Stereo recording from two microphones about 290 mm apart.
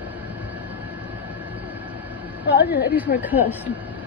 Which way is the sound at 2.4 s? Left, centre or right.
Left.